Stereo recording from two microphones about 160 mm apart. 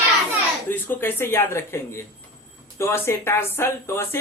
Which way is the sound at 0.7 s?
10° left (ahead or behind).